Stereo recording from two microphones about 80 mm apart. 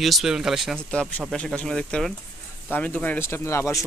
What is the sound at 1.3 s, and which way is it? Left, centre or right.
Speech, centre.